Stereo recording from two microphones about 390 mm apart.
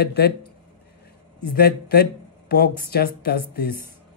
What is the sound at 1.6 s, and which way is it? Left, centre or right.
A man's voice, left.